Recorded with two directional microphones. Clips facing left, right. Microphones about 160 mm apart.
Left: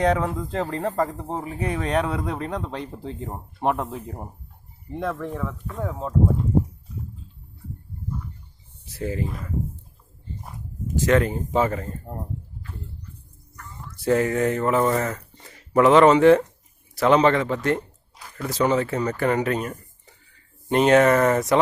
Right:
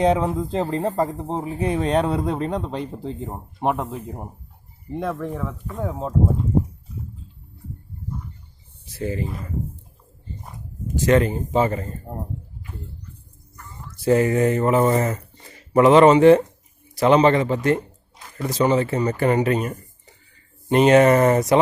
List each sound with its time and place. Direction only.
0.0 s speech: 20° right (ahead or behind)
9.0 s speech: centre (ahead or behind)
11.0 s speech: centre (ahead or behind)
14.0 s speech: 5° right (ahead or behind)
14.8 s speech: 20° right (ahead or behind)
15.4 s speech: centre (ahead or behind)
21.1 s speech: 15° right (ahead or behind)